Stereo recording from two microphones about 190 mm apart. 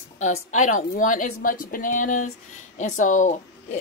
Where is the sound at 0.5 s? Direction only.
40° left (ahead or behind).